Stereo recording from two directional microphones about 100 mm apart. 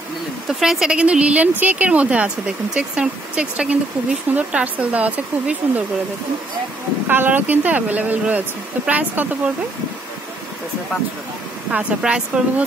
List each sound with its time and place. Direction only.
0.5 s speech: 5° right (ahead or behind)
7.1 s speech: 20° right (ahead or behind)
11.7 s speech: 10° right (ahead or behind)